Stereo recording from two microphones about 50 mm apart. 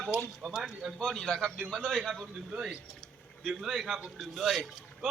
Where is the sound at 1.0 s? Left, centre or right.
Centre.